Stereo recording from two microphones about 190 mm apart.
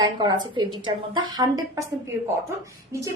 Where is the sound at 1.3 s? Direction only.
20° right (ahead or behind).